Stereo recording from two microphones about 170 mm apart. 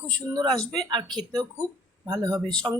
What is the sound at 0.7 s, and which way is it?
Speech, 25° right (ahead or behind).